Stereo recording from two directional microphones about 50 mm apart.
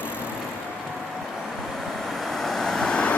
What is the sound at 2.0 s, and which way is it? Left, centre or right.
Vehicle, centre.